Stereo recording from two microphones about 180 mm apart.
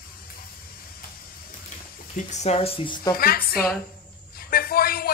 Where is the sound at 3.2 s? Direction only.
55° left (ahead or behind).